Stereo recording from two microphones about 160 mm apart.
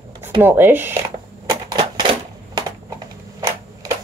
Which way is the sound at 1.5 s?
30° right (ahead or behind).